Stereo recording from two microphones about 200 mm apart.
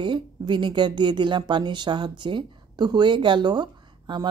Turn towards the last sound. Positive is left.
turn(degrees=-20)  # may be behind; listen again after turning